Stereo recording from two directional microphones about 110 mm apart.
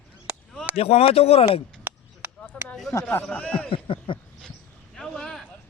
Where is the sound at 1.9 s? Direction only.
15° right (ahead or behind).